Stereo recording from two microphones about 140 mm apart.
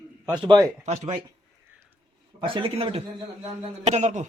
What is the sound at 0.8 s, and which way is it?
Speech, 55° right (ahead or behind).